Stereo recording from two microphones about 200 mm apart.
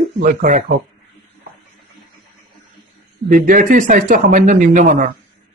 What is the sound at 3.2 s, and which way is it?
Speech, 45° right (ahead or behind).